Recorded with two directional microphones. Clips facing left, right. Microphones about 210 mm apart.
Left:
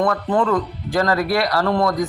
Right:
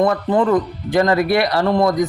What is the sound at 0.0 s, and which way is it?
A man's voice, 20° right (ahead or behind).